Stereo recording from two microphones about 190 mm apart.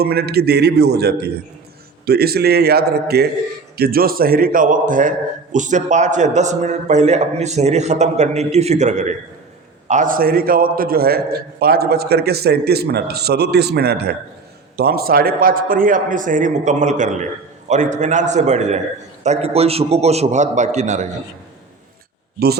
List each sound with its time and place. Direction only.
0.0 s a man's voice: 55° right (ahead or behind); by 21.1 s 40° right (ahead or behind)